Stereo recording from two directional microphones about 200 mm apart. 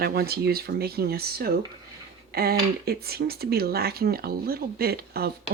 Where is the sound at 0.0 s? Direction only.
50° right (ahead or behind).